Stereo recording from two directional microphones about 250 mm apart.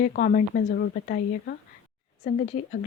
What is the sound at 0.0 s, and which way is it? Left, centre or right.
Speech, left.